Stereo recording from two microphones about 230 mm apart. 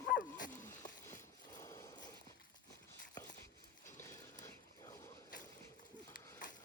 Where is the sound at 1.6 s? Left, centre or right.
Centre.